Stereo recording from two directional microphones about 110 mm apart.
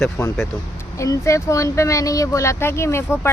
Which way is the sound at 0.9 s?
30° left (ahead or behind).